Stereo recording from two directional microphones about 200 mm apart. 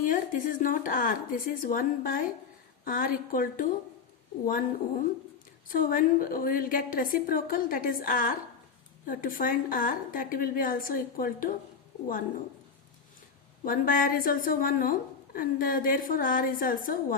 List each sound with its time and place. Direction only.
0.0 s a woman's voice: 40° left (ahead or behind)
13.7 s a woman's voice: 45° left (ahead or behind)